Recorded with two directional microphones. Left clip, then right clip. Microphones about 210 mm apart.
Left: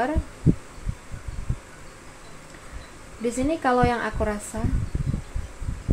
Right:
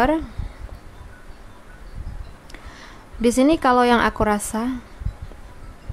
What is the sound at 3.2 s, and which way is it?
A woman's voice, 35° right (ahead or behind).